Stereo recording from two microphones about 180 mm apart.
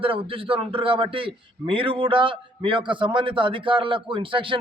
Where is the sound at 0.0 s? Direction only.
30° right (ahead or behind).